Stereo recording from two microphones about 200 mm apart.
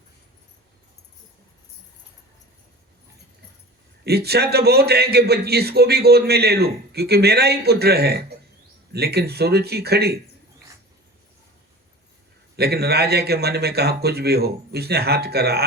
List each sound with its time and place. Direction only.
4.0 s a man's voice: 55° right (ahead or behind)
12.5 s a man's voice: 55° right (ahead or behind)